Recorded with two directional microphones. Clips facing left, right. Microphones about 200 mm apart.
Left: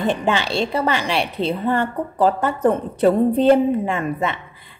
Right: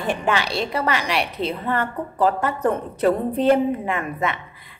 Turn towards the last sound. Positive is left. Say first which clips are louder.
# left 1 dB
turn(degrees=25)  # may be behind; listen again after turning